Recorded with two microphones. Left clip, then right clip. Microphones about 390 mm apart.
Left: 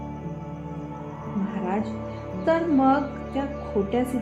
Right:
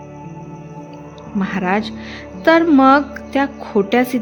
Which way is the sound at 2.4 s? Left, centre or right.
Right.